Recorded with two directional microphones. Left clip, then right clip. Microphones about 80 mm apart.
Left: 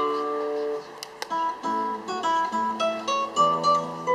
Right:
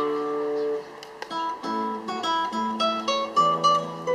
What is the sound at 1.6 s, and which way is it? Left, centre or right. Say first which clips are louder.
Guitar: left 1 dB; right.